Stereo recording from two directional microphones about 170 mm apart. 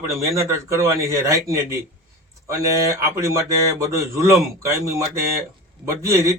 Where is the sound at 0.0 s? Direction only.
15° right (ahead or behind).